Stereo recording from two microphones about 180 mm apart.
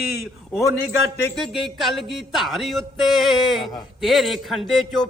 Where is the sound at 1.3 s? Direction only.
Centre (ahead or behind).